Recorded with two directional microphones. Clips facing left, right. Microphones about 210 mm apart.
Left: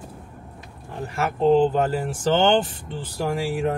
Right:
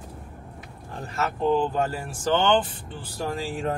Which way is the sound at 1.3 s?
20° left (ahead or behind).